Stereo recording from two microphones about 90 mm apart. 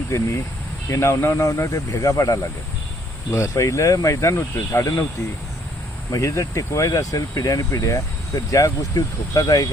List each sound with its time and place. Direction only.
0.1 s speech: 35° left (ahead or behind)
6.1 s speech: 35° left (ahead or behind)